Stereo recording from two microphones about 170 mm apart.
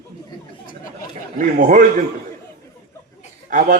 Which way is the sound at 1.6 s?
55° right (ahead or behind).